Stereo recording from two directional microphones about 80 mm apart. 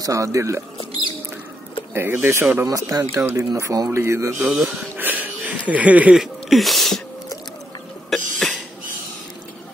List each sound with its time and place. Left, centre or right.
0.0 s speech: right
2.0 s speech: right
2.6 s speech: right
4.5 s speech: centre
4.9 s a sound: right
6.1 s speech: centre
8.1 s cough: centre